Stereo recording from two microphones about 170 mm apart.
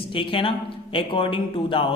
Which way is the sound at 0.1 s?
30° left (ahead or behind).